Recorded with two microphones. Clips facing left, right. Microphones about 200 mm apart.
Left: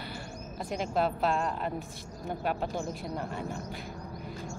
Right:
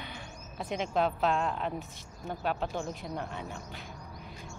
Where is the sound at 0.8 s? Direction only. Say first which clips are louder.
Even; 5° left (ahead or behind).